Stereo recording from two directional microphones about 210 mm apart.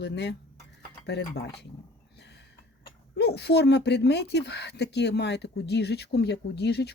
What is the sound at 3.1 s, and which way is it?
Speech, 50° left (ahead or behind).